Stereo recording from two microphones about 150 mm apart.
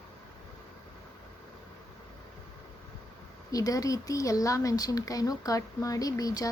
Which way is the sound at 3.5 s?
25° left (ahead or behind).